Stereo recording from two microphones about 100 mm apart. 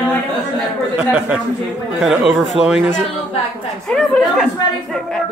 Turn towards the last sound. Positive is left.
turn(degrees=10)  # may be behind; listen again after turning